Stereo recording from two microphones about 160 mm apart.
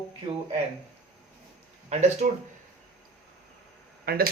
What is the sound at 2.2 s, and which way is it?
Speech, 60° right (ahead or behind).